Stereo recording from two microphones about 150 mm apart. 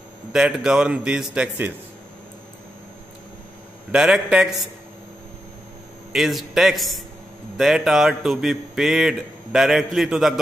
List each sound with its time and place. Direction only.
0.3 s a man's voice: 5° right (ahead or behind)
3.9 s a man's voice: 5° right (ahead or behind)
6.1 s a man's voice: centre (ahead or behind)